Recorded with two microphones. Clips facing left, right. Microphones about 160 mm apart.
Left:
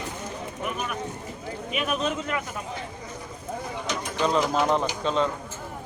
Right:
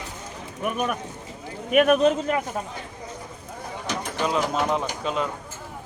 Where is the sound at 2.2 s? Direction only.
35° right (ahead or behind).